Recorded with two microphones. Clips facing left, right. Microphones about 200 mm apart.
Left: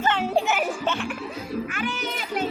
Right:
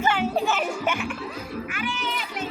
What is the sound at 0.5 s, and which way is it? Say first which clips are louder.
Music: left 1 dB; 5° left (ahead or behind).